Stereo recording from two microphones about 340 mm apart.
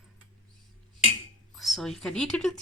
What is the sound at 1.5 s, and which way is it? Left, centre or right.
Speech, centre.